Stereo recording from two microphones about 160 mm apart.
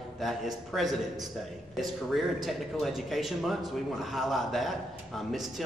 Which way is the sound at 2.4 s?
Centre (ahead or behind).